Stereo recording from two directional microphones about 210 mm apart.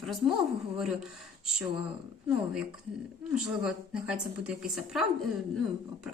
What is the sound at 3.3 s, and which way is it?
Speech, 5° right (ahead or behind).